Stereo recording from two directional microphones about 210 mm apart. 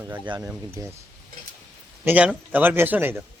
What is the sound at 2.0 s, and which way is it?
A man's voice, 5° right (ahead or behind).